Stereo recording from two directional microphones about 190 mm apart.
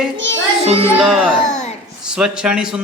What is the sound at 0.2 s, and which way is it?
Music, 75° right (ahead or behind).